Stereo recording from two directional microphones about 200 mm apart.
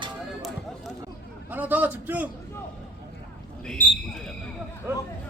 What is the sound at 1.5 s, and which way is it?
Speech, 10° right (ahead or behind).